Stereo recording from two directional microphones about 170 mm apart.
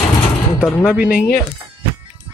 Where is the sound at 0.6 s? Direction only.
5° left (ahead or behind).